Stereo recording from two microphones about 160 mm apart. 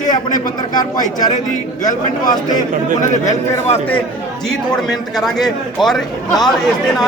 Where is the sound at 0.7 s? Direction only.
25° left (ahead or behind).